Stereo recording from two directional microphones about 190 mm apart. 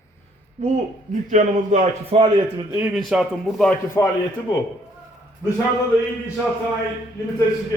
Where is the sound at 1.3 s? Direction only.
40° right (ahead or behind).